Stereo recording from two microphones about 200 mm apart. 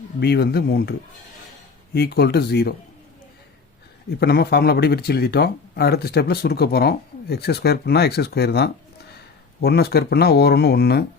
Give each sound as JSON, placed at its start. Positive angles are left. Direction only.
{"t": 0.2, "sound": "speech", "side_deg": 55}
{"t": 4.2, "sound": "speech", "side_deg": 50}